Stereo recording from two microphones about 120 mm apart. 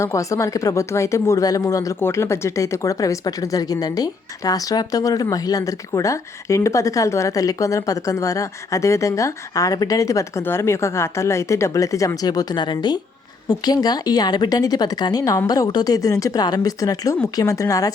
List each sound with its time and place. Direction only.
0.0 s speech: 25° left (ahead or behind)